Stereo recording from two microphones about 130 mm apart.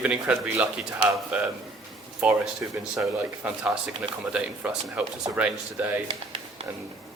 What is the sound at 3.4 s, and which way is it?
A man's voice, 10° right (ahead or behind).